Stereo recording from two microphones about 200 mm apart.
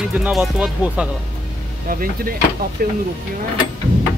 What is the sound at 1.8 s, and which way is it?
Speech, 45° right (ahead or behind).